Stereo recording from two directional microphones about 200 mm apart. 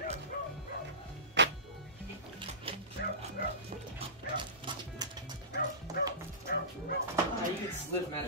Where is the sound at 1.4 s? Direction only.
60° right (ahead or behind).